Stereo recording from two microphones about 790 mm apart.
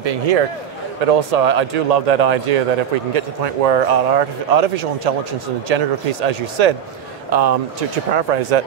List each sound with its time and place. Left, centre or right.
0.0 s a man's voice: right